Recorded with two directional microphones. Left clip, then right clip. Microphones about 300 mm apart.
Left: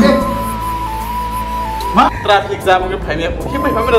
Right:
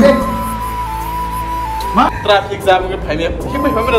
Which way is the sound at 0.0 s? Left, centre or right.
Centre.